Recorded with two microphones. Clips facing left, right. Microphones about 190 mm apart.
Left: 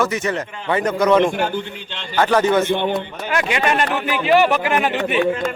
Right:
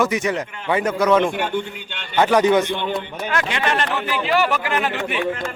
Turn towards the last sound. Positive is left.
turn(degrees=20)  # may be behind; listen again after turning